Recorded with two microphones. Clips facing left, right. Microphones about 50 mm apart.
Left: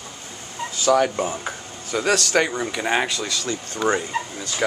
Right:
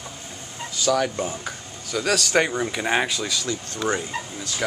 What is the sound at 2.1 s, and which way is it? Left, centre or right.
Speech, centre.